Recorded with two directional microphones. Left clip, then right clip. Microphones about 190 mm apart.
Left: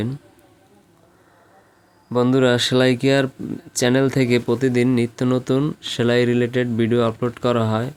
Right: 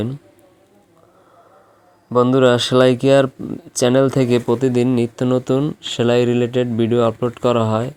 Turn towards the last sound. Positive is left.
turn(degrees=-5)  # may be behind; listen again after turning